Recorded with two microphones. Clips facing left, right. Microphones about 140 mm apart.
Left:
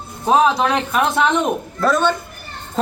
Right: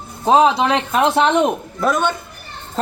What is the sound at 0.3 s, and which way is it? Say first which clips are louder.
A man's voice: right 2 dB; 25° right (ahead or behind).